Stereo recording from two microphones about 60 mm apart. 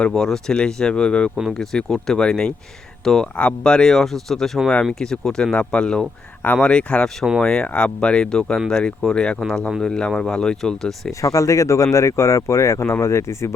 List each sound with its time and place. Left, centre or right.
0.1 s speech: centre
11.2 s speech: left